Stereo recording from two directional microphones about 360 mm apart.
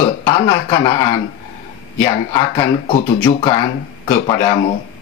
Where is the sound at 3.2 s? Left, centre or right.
Centre.